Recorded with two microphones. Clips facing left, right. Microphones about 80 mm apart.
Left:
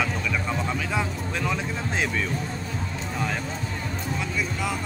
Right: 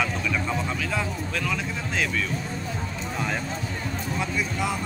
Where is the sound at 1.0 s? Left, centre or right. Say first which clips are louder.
Left 1 dB; left.